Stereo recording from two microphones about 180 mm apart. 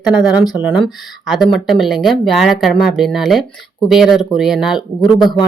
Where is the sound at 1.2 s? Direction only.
Centre (ahead or behind).